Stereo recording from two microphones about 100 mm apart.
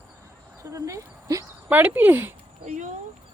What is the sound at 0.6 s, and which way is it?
Dog, 30° right (ahead or behind).